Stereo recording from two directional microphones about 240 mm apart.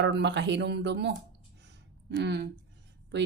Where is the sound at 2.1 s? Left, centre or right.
Right.